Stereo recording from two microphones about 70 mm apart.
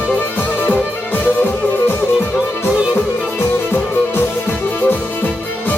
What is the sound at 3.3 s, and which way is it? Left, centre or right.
Music, left.